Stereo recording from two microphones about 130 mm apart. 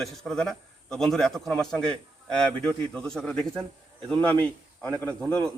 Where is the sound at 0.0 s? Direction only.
5° left (ahead or behind).